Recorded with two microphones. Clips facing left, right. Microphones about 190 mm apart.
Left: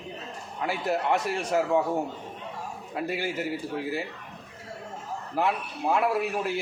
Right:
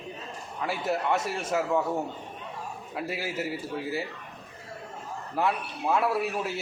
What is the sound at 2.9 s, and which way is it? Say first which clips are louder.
A man's voice: left 2 dB; centre (ahead or behind).